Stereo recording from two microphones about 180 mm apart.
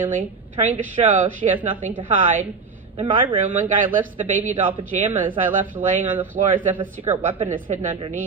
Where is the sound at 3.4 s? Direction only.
45° right (ahead or behind).